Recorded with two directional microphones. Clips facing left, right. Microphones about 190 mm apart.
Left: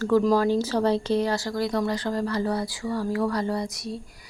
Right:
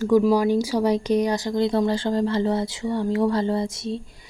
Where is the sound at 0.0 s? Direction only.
10° right (ahead or behind).